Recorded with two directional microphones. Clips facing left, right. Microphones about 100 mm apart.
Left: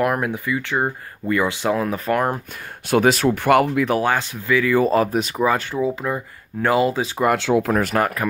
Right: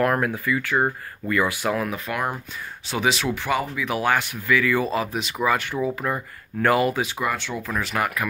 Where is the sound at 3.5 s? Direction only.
65° left (ahead or behind).